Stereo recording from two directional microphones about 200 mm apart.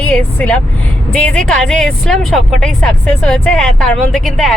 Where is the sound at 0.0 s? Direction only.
5° left (ahead or behind).